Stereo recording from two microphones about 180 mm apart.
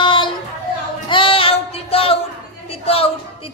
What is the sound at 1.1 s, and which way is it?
Singing, 30° left (ahead or behind).